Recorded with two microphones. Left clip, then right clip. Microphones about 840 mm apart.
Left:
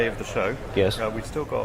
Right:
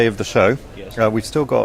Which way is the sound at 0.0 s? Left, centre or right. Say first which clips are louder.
Right 10 dB; right.